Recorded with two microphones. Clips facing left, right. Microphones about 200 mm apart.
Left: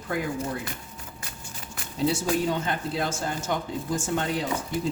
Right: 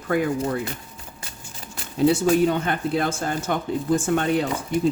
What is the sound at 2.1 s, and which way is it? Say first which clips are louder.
Speech: right 7 dB; 60° right (ahead or behind).